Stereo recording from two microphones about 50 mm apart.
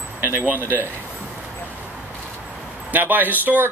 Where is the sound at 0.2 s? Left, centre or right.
Right.